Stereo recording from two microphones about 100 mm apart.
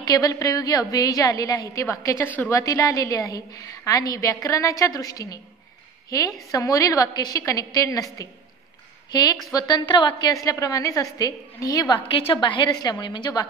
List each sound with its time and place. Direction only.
0.0 s a woman's voice: 40° left (ahead or behind)
10.3 s a woman's voice: 35° left (ahead or behind)
12.1 s a woman's voice: 65° left (ahead or behind); by 13.5 s 45° left (ahead or behind)